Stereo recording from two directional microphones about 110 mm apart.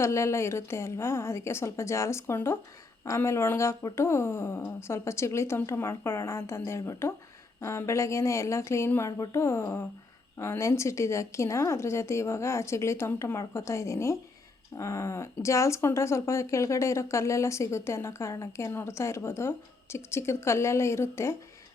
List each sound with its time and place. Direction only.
0.0 s speech: 25° left (ahead or behind)